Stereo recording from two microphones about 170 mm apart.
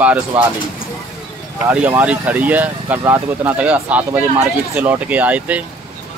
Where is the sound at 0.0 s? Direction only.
10° right (ahead or behind).